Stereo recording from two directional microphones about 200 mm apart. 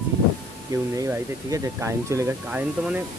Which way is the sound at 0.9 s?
15° right (ahead or behind).